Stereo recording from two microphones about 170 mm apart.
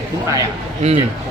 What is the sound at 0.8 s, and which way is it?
Speech, 40° right (ahead or behind).